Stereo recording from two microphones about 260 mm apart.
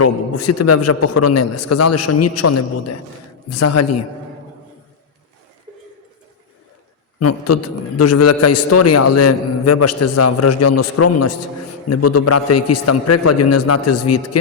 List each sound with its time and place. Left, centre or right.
0.0 s a man's voice: left
7.2 s a man's voice: left